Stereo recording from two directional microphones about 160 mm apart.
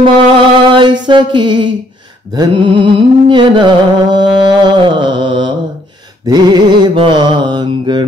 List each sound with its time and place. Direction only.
0.6 s mantra: 30° right (ahead or behind)
2.3 s music: 30° right (ahead or behind)
6.2 s mantra: 25° right (ahead or behind)